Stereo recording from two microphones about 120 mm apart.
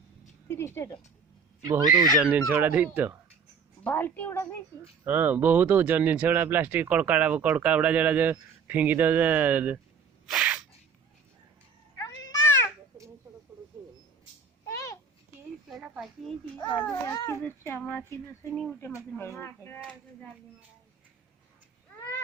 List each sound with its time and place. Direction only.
0.4 s speech: 20° left (ahead or behind)
1.6 s speech: 30° right (ahead or behind)
2.5 s speech: 15° right (ahead or behind)
3.8 s a woman's voice: 15° left (ahead or behind)
5.0 s speech: 15° right (ahead or behind)
10.2 s sneeze: 10° right (ahead or behind)
11.9 s cat: 25° left (ahead or behind)
14.7 s babbling: 25° left (ahead or behind)
15.7 s a sound: centre (ahead or behind)
17.1 s a woman's voice: 25° left (ahead or behind)
18.5 s speech: centre (ahead or behind)
18.8 s speech: 20° left (ahead or behind)